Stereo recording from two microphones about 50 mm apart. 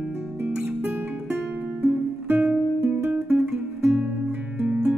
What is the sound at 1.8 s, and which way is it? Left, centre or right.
Music, right.